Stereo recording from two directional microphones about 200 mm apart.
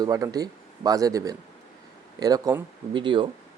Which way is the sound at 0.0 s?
20° right (ahead or behind).